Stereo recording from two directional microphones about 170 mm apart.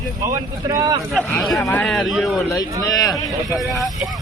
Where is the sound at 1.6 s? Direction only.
15° left (ahead or behind).